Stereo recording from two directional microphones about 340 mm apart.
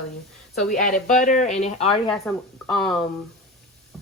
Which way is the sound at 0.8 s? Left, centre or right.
Left.